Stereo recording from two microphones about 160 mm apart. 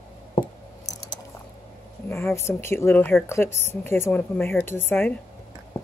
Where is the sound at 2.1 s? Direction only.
15° left (ahead or behind).